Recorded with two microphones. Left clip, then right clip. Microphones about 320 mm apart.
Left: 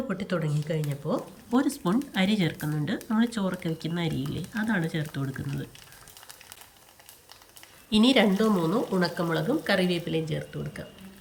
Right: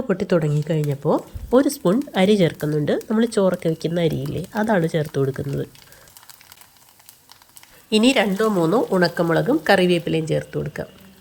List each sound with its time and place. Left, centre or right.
0.1 s speech: centre
7.9 s speech: centre